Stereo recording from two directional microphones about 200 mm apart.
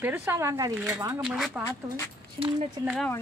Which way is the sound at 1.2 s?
Centre (ahead or behind).